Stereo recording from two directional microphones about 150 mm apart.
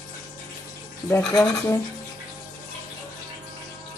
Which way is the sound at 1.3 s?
20° left (ahead or behind).